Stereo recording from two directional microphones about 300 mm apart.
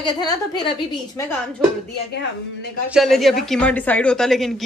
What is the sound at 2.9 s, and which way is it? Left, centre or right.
Speech, centre.